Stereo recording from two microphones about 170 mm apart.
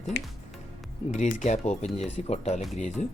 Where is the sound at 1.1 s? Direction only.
45° left (ahead or behind).